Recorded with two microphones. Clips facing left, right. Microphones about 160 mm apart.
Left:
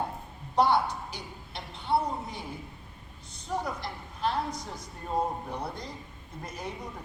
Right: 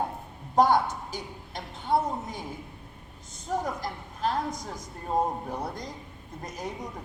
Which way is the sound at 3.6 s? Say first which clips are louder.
Right 3 dB; 45° right (ahead or behind).